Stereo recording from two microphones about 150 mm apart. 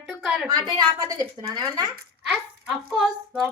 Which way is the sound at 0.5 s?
30° right (ahead or behind).